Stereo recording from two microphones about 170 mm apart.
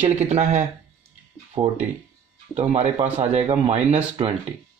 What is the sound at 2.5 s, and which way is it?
Speech, 40° right (ahead or behind).